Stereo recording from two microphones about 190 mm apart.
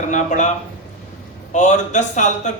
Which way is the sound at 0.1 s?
40° left (ahead or behind).